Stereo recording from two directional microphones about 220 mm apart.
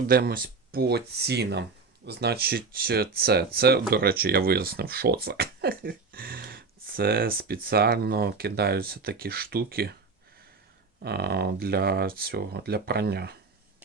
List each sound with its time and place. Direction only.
0.1 s speech: 45° right (ahead or behind)
11.0 s speech: 45° right (ahead or behind)